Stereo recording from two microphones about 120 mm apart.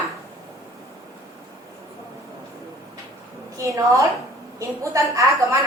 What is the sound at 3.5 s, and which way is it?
A woman's voice, 25° right (ahead or behind).